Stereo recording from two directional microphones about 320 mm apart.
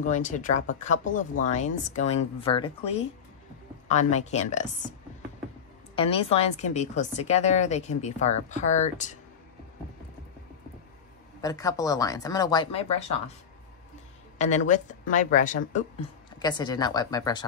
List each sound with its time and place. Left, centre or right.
0.0 s a woman's voice: left
5.9 s a woman's voice: centre
11.4 s speech: centre
14.7 s speech: left